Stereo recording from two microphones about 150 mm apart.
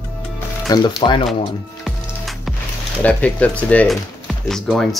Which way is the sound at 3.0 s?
10° left (ahead or behind).